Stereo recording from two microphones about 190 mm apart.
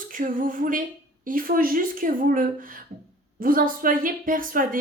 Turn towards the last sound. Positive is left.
turn(degrees=-45)  # may be behind; listen again after turning